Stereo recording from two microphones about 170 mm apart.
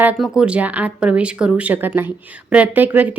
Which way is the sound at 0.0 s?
5° right (ahead or behind).